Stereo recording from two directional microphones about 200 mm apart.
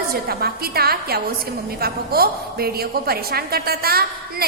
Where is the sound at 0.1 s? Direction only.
50° right (ahead or behind).